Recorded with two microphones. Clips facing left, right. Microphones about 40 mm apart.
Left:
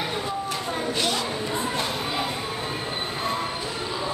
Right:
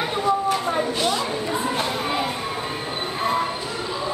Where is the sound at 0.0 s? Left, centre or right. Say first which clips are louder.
Right 7 dB; centre.